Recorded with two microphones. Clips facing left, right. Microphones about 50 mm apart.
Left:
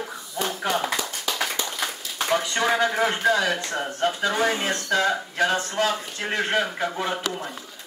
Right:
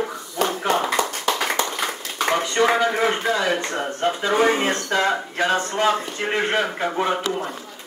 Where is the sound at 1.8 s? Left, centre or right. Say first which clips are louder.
Right 5 dB; right.